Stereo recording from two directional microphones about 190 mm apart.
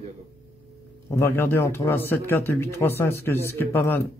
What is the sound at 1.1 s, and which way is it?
Speech, 10° left (ahead or behind).